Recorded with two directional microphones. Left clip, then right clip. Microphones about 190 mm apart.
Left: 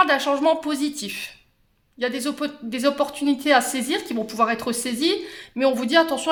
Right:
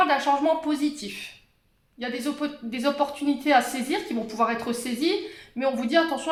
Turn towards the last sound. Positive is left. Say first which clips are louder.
# left 4 dB
turn(degrees=50)  # may be behind; listen again after turning